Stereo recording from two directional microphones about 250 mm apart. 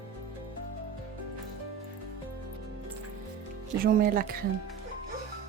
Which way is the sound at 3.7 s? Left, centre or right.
Right.